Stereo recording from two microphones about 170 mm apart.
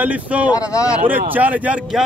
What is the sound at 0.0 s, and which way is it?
Speech, 10° right (ahead or behind).